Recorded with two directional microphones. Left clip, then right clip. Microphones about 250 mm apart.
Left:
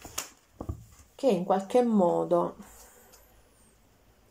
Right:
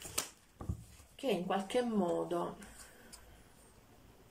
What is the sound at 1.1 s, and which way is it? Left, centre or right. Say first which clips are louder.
Speech: left 10 dB; left.